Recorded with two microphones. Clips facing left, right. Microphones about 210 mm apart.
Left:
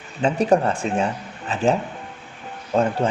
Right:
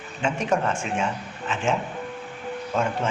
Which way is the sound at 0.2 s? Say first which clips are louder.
Left 6 dB; 35° left (ahead or behind).